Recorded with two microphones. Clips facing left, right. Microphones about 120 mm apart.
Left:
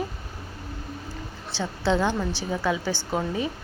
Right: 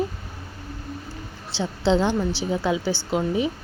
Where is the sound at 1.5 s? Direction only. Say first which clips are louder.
Right 3 dB; 20° right (ahead or behind).